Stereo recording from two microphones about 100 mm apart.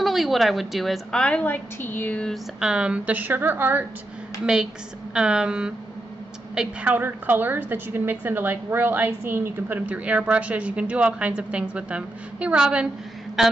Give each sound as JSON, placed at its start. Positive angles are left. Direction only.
{"t": 0.0, "sound": "a woman's voice", "side_deg": 0}
{"t": 2.6, "sound": "a woman's voice", "side_deg": -10}
{"t": 4.5, "sound": "a woman's voice", "side_deg": -5}